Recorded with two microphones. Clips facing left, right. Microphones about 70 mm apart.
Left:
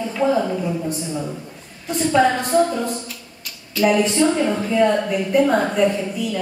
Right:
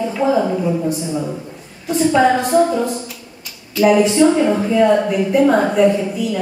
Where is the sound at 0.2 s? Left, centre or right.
Centre.